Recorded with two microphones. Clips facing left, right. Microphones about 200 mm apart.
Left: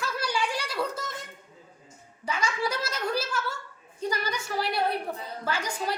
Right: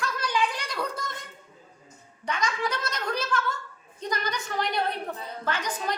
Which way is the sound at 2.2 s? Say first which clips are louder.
Even; 10° left (ahead or behind).